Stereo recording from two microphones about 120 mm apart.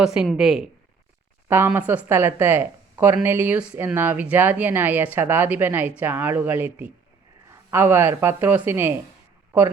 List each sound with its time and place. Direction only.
0.0 s speech: 5° right (ahead or behind)
1.5 s speech: 20° right (ahead or behind)